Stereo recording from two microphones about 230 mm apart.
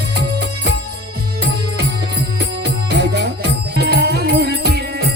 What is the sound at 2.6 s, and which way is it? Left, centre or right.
Music, right.